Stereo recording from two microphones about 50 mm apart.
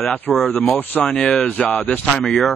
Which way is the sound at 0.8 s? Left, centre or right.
Left.